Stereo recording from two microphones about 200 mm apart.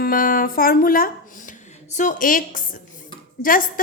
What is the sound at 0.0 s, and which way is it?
A woman's voice, 45° left (ahead or behind).